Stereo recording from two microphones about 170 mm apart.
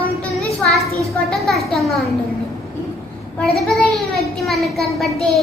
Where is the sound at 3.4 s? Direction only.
Centre (ahead or behind).